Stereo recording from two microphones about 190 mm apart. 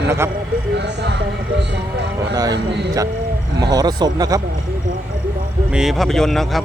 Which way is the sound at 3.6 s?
20° right (ahead or behind).